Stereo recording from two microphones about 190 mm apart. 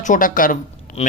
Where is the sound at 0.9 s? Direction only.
45° left (ahead or behind).